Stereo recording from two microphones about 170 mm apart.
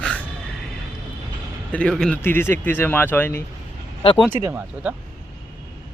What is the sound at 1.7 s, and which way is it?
A man's voice, 5° left (ahead or behind).